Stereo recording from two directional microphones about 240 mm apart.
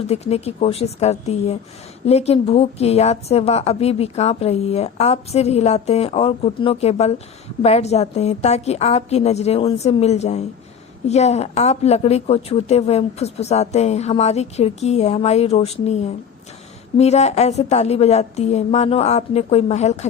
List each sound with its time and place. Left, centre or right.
0.1 s a woman's voice: left